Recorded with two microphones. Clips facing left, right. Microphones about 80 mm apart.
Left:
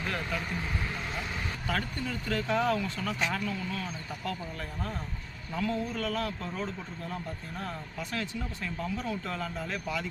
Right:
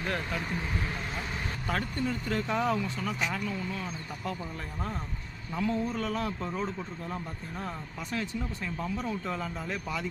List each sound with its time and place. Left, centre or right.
0.0 s speech: right
1.6 s speech: right
3.6 s a man's voice: right
5.5 s a man's voice: right
8.1 s speech: centre